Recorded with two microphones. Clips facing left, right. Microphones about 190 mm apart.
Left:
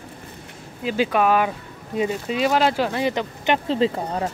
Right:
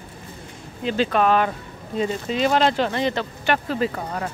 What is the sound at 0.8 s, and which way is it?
Speech, 10° left (ahead or behind).